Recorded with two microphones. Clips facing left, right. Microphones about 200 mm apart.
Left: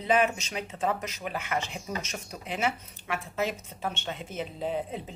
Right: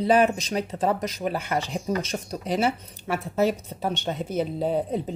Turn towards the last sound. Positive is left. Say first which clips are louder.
# right 7 dB
turn(degrees=-40)  # may be behind; listen again after turning